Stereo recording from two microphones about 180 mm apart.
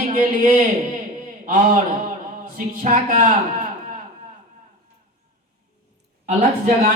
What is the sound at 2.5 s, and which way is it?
A man's voice, 50° right (ahead or behind).